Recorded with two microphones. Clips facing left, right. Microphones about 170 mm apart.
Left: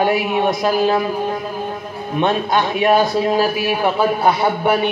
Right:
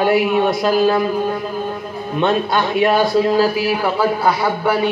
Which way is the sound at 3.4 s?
20° left (ahead or behind).